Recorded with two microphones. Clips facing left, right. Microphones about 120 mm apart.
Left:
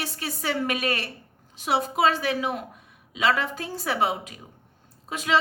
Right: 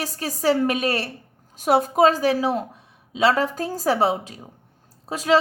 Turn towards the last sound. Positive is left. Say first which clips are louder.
# right 5 dB
turn(degrees=-35)  # may be behind; listen again after turning